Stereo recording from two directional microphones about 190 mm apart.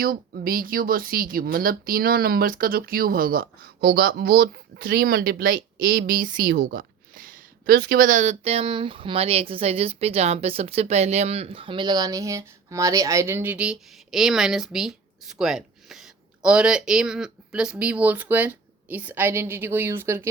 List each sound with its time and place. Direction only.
0.0 s speech: 50° right (ahead or behind); by 20.2 s 10° right (ahead or behind)